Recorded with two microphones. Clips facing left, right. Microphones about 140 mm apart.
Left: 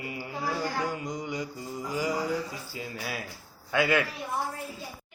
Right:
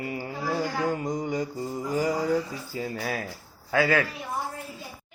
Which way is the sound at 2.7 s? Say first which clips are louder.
Right 7 dB; 45° right (ahead or behind).